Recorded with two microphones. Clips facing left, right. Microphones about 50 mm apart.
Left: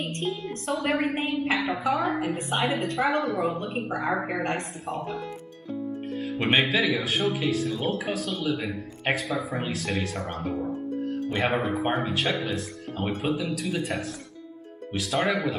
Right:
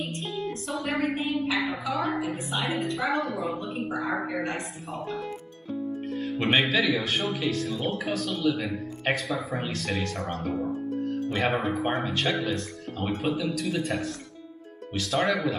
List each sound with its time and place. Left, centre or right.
0.9 s a woman's voice: left
1.2 s a woman's voice: left
1.7 s a woman's voice: left
6.3 s speech: centre